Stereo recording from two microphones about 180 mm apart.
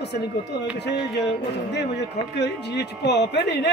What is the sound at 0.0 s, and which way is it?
Speech, 70° left (ahead or behind).